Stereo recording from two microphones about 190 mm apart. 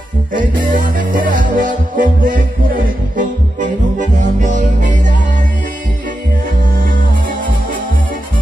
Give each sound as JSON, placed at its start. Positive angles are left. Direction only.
{"t": 0.7, "sound": "music", "side_deg": -45}